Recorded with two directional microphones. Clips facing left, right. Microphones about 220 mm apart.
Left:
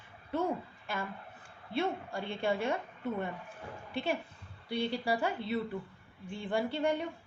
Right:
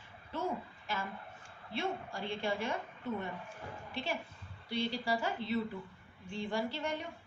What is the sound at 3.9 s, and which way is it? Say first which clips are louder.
A woman's voice: left 5 dB; 55° left (ahead or behind).